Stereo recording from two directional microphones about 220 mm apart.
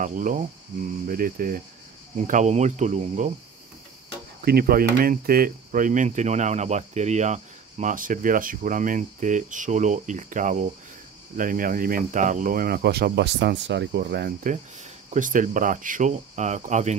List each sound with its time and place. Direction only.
0.0 s speech: 35° right (ahead or behind)
4.4 s speech: 45° right (ahead or behind)